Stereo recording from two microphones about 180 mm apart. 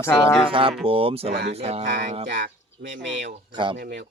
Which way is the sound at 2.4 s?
70° right (ahead or behind).